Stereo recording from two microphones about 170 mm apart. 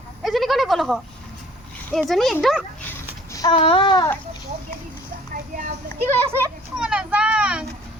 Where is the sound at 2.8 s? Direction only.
20° left (ahead or behind).